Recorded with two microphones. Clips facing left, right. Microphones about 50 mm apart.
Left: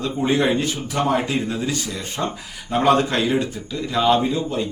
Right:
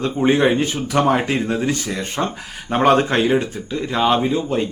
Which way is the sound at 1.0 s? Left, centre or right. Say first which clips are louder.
Right 3 dB; right.